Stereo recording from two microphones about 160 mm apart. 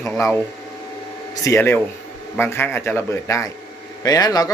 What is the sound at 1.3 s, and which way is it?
Speech, 20° left (ahead or behind).